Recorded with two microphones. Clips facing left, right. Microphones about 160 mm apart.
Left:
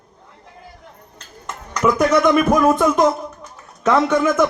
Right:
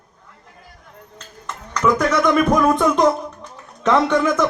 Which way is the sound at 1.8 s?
10° left (ahead or behind).